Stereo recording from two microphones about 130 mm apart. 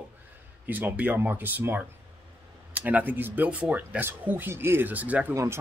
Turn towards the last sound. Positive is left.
turn(degrees=-25)  # may be behind; listen again after turning